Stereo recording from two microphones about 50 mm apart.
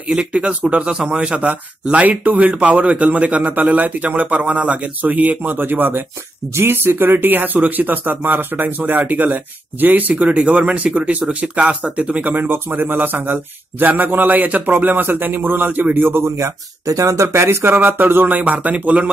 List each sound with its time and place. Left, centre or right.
0.3 s speech: right
0.9 s a man's voice: centre
1.2 s speech: right
12.4 s speech: right
17.7 s speech: right